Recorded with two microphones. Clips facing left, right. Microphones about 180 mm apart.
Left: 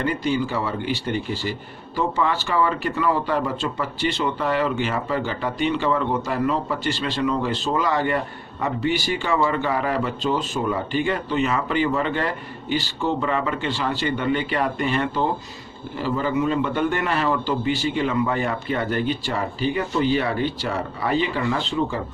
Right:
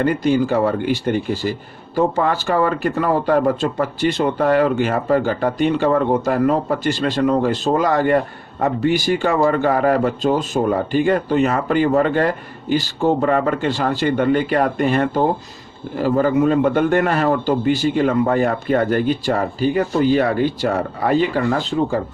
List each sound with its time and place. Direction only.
0.0 s speech: 45° right (ahead or behind)